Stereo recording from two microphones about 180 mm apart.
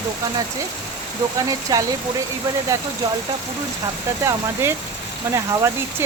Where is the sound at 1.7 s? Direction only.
20° right (ahead or behind).